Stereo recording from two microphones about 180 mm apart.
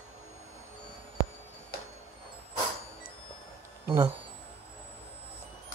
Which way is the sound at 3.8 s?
15° right (ahead or behind).